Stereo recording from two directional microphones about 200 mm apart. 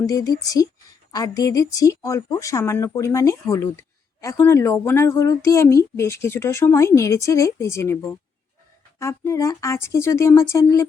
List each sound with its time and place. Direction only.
0.0 s a woman's voice: 20° left (ahead or behind)